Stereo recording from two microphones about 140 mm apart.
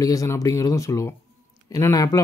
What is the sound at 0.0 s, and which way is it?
Speech, 25° left (ahead or behind).